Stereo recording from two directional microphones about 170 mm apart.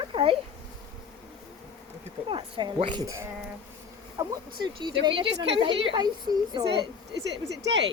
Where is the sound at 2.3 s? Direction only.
25° right (ahead or behind).